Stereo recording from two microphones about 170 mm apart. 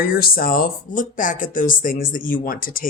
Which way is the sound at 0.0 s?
60° left (ahead or behind).